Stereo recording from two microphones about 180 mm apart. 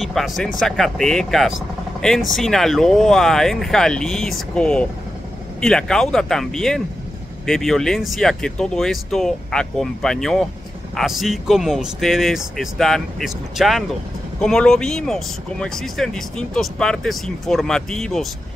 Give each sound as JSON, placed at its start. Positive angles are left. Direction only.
{"t": 0.0, "sound": "speech", "side_deg": 0}